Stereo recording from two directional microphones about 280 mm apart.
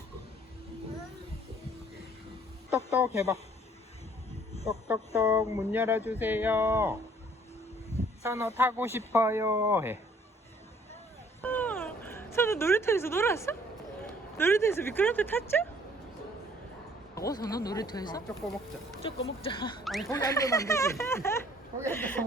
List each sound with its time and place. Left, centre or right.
2.6 s speech: centre
4.6 s speech: centre
8.2 s speech: centre
11.4 s a sound: centre
14.3 s speech: centre
17.2 s speech: centre
19.8 s speech: centre
20.1 s speech: centre